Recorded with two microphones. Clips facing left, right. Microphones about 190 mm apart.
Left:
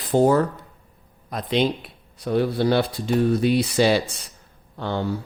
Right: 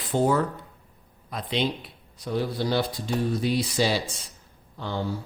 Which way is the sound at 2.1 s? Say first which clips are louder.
Left 6 dB; 60° left (ahead or behind).